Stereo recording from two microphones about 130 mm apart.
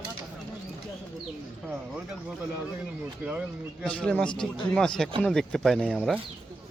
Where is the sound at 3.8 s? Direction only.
10° left (ahead or behind).